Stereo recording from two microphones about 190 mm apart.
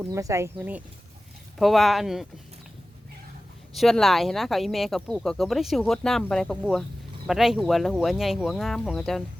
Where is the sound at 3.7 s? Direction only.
Centre (ahead or behind).